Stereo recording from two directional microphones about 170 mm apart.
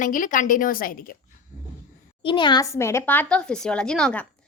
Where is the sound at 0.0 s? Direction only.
50° left (ahead or behind).